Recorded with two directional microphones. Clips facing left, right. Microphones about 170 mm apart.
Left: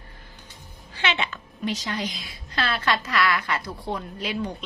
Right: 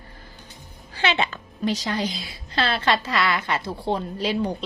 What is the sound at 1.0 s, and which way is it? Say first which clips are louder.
A woman's voice: right 4 dB; 35° right (ahead or behind).